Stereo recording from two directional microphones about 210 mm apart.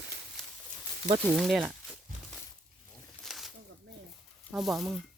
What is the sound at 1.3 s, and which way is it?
Speech, centre (ahead or behind).